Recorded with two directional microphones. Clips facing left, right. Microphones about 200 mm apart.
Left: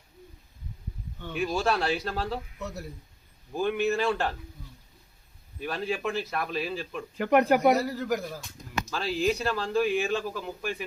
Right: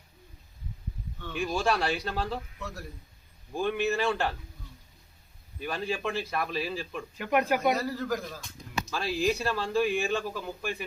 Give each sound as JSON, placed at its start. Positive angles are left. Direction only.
{"t": 1.3, "sound": "a man's voice", "side_deg": 5}
{"t": 2.6, "sound": "a man's voice", "side_deg": 20}
{"t": 3.5, "sound": "a man's voice", "side_deg": 0}
{"t": 5.5, "sound": "a man's voice", "side_deg": 0}
{"t": 7.2, "sound": "speech", "side_deg": 45}
{"t": 7.8, "sound": "a man's voice", "side_deg": 15}
{"t": 8.9, "sound": "a man's voice", "side_deg": 0}